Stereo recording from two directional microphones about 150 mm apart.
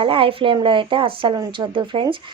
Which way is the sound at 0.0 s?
35° right (ahead or behind).